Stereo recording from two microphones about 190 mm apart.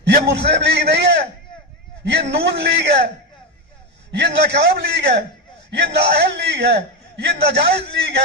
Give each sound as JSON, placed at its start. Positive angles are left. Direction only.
{"t": 0.0, "sound": "a man's voice", "side_deg": -60}
{"t": 4.1, "sound": "a man's voice", "side_deg": -65}